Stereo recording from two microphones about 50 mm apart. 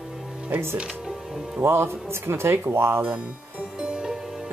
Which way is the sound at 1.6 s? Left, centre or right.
Right.